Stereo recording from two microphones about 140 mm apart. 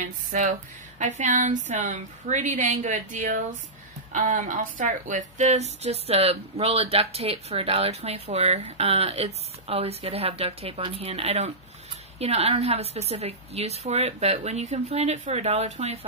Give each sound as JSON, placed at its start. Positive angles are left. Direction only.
{"t": 0.0, "sound": "speech", "side_deg": -65}